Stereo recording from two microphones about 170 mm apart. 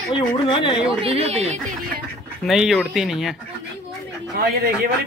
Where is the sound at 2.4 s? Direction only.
Centre (ahead or behind).